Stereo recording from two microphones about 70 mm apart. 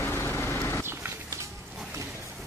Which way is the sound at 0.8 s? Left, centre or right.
Right.